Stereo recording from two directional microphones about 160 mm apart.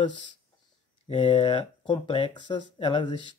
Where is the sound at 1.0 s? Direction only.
35° left (ahead or behind).